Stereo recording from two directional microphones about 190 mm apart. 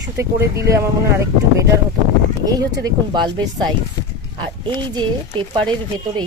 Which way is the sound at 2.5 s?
20° right (ahead or behind).